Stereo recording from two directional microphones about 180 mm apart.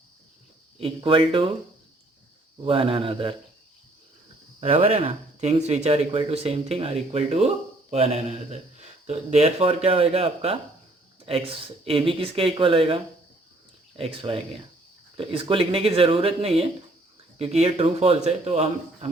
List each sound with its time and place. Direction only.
0.8 s speech: 30° right (ahead or behind)
2.6 s speech: 30° right (ahead or behind)
4.6 s speech: 35° right (ahead or behind)